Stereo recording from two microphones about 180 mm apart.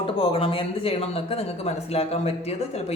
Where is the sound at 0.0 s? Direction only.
30° left (ahead or behind).